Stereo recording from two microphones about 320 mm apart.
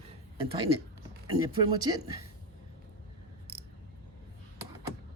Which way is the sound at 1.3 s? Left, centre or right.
Centre.